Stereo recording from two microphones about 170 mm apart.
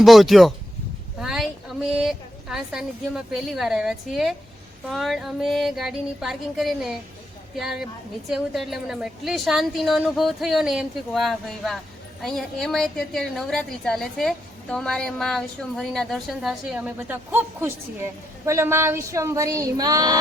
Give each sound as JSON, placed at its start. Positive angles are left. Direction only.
{"t": 0.0, "sound": "a woman's voice", "side_deg": 0}
{"t": 1.2, "sound": "a sound", "side_deg": -5}
{"t": 4.9, "sound": "a woman's voice", "side_deg": 0}